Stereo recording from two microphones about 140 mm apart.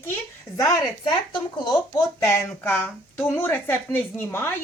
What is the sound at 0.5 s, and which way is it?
Speech, 25° left (ahead or behind).